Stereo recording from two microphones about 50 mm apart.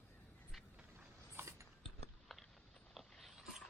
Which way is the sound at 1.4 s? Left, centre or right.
Right.